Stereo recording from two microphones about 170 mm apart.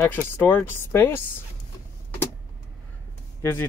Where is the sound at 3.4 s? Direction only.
15° left (ahead or behind).